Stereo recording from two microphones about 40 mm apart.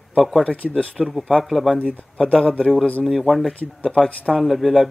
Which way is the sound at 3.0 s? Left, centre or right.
Centre.